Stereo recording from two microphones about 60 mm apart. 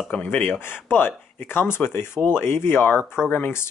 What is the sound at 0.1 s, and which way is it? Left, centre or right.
Speech, left.